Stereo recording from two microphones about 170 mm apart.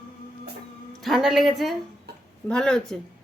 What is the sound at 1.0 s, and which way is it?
Speech, centre (ahead or behind).